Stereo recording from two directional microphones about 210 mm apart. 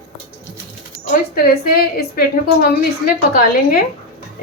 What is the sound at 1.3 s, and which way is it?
A woman's voice, 45° left (ahead or behind).